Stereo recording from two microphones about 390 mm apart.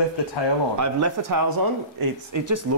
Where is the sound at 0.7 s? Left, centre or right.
Right.